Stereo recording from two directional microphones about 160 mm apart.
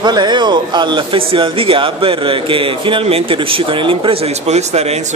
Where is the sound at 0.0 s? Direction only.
30° right (ahead or behind).